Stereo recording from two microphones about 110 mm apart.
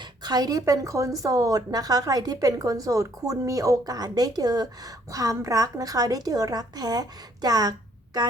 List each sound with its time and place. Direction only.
0.0 s speech: 40° right (ahead or behind)